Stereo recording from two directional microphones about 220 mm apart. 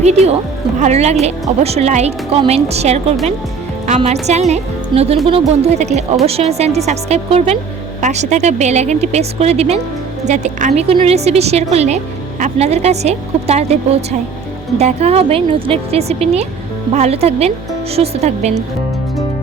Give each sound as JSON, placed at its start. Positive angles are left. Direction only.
{"t": 0.0, "sound": "speech", "side_deg": -30}